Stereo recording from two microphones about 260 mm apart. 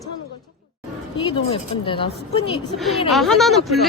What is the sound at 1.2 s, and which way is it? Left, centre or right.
Speech, centre.